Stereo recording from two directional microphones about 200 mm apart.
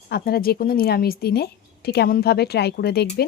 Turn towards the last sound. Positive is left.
turn(degrees=55)  # may be behind; listen again after turning